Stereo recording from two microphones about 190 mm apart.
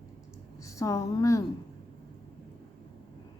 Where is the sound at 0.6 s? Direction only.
15° left (ahead or behind).